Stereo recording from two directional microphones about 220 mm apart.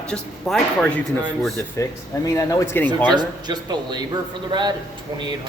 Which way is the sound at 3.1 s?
20° right (ahead or behind).